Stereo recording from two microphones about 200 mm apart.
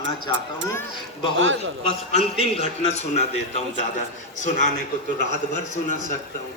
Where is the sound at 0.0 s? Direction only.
70° right (ahead or behind).